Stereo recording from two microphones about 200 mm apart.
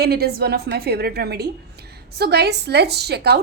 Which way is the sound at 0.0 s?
50° right (ahead or behind).